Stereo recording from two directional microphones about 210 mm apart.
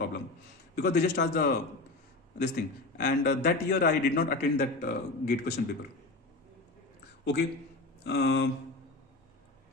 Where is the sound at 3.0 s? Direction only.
50° left (ahead or behind).